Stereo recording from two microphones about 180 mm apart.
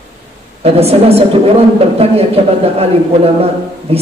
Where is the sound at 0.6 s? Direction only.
35° right (ahead or behind).